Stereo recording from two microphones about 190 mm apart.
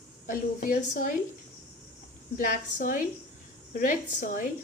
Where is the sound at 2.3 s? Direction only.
45° left (ahead or behind).